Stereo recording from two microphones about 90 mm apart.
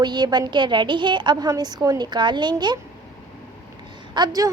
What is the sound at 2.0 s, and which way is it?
Speech, 55° right (ahead or behind).